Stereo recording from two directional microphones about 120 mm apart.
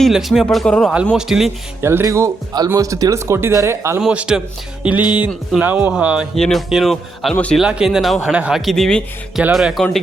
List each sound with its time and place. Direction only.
0.0 s speech: centre (ahead or behind)
1.8 s speech: 20° right (ahead or behind)
4.0 s speech: 10° right (ahead or behind)
5.0 s speech: 40° left (ahead or behind)
5.5 s speech: 10° right (ahead or behind)
6.3 s speech: centre (ahead or behind)